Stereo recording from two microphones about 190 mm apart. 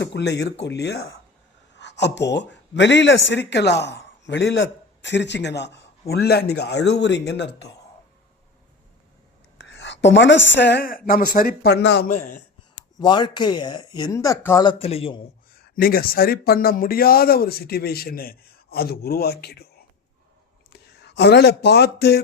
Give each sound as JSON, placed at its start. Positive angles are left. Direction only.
{"t": 0.0, "sound": "speech", "side_deg": 65}
{"t": 9.6, "sound": "a woman's voice", "side_deg": 70}
{"t": 12.0, "sound": "a sound", "side_deg": 45}
{"t": 13.0, "sound": "speech", "side_deg": 20}
{"t": 15.5, "sound": "speech", "side_deg": 50}
{"t": 20.7, "sound": "speech", "side_deg": 60}